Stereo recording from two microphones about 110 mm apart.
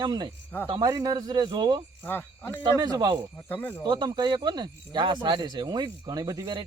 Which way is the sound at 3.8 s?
40° right (ahead or behind).